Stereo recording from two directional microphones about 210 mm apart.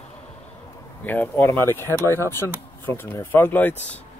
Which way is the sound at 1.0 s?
10° left (ahead or behind).